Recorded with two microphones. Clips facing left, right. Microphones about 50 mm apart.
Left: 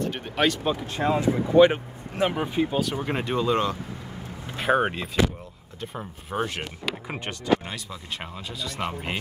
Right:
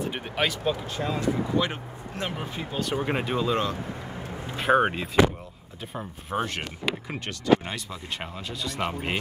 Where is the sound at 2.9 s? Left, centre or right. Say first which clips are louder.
Even; centre.